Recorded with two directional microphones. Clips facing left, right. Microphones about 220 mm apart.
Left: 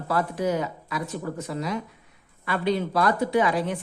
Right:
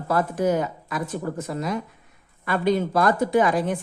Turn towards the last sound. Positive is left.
turn(degrees=-50)  # may be behind; listen again after turning